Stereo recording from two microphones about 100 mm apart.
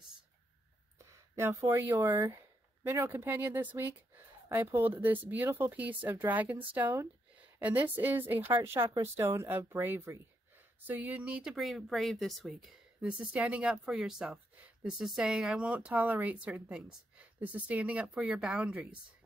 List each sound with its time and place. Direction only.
0.9 s a woman's voice: 30° right (ahead or behind); by 12.6 s centre (ahead or behind)
13.0 s speech: 10° right (ahead or behind)